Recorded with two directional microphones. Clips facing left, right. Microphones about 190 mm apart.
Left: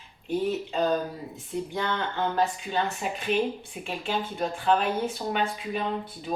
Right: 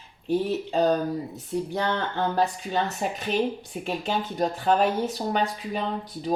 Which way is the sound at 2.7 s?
40° right (ahead or behind).